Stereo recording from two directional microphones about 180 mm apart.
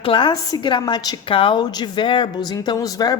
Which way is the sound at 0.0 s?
25° left (ahead or behind).